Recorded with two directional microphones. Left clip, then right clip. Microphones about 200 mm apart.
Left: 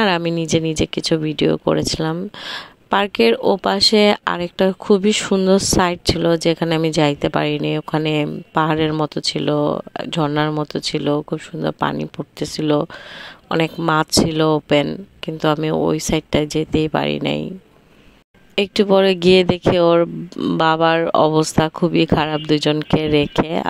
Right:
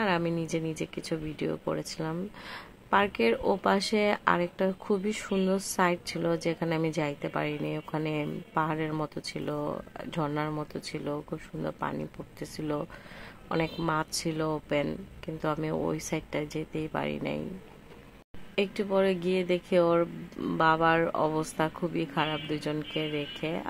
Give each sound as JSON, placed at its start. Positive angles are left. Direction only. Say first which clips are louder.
{"t": 0.0, "sound": "a sound", "louder": "left 11 dB", "side_deg": 45}
{"t": 0.7, "sound": "speech", "louder": "left 16 dB", "side_deg": 45}
{"t": 18.5, "sound": "speech", "louder": "left 13 dB", "side_deg": 50}